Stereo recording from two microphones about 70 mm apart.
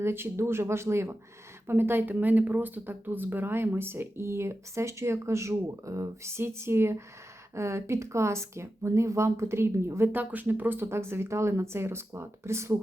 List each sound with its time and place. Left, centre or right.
0.0 s speech: right